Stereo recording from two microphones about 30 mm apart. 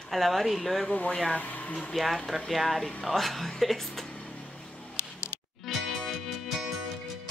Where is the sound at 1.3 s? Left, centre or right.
Left.